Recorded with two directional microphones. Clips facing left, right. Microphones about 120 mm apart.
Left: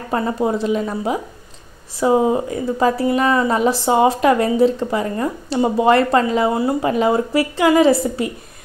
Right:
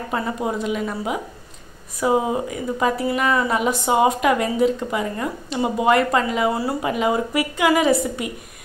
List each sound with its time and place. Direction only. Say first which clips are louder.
0.1 s speech: left 6 dB; 35° left (ahead or behind)